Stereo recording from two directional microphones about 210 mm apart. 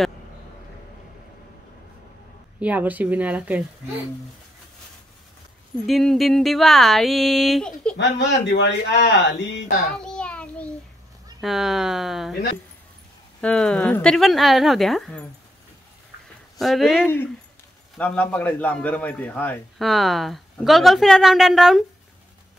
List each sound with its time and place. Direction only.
2.6 s a woman's voice: 5° right (ahead or behind)
5.9 s a man's voice: centre (ahead or behind)
8.2 s speech: 60° left (ahead or behind)
9.9 s child singing: 5° left (ahead or behind)
11.4 s a man's voice: centre (ahead or behind)
13.4 s a man's voice: 5° left (ahead or behind)
16.5 s a man's voice: centre (ahead or behind)